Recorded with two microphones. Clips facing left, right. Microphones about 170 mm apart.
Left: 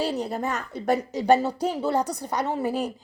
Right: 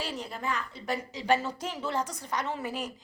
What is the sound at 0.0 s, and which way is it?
A woman's voice, 35° left (ahead or behind).